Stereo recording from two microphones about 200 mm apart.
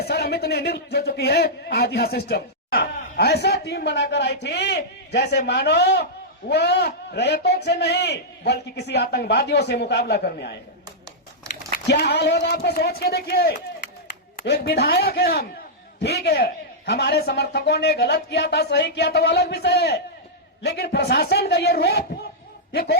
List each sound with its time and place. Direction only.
0.0 s a man's voice: 50° left (ahead or behind)
11.9 s a man's voice: 55° left (ahead or behind)